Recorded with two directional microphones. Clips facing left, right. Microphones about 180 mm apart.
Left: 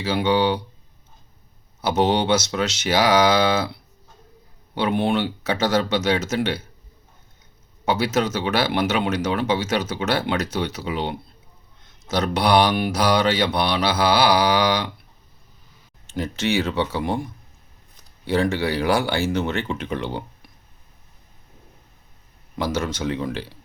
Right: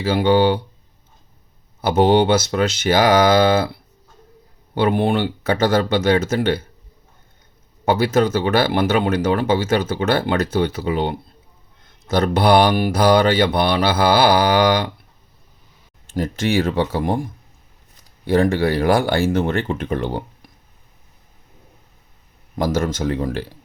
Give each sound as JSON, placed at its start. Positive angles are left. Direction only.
{"t": 0.0, "sound": "speech", "side_deg": -50}
{"t": 1.8, "sound": "speech", "side_deg": -55}
{"t": 4.8, "sound": "speech", "side_deg": -55}
{"t": 7.9, "sound": "speech", "side_deg": -55}
{"t": 16.1, "sound": "speech", "side_deg": -50}
{"t": 18.3, "sound": "speech", "side_deg": -50}
{"t": 22.5, "sound": "speech", "side_deg": -50}